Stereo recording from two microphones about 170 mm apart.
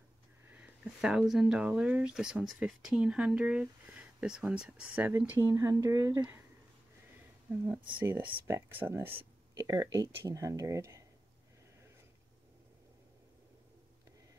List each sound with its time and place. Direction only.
0.5 s speech: 5° right (ahead or behind)
7.6 s speech: 10° right (ahead or behind)